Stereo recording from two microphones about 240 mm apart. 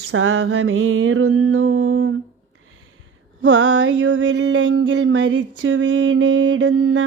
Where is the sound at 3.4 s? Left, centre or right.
Right.